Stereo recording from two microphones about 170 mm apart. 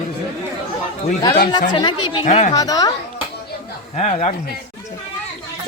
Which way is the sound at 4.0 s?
40° left (ahead or behind).